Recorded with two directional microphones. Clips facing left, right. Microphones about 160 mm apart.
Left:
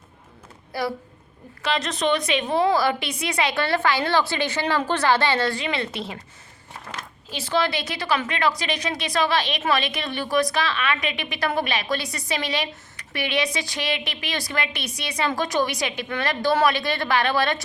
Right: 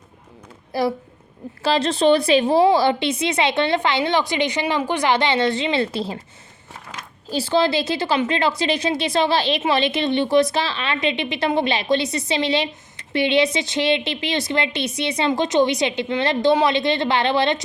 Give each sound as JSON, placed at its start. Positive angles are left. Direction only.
{"t": 0.7, "sound": "a woman's voice", "side_deg": -25}
{"t": 7.3, "sound": "a woman's voice", "side_deg": -30}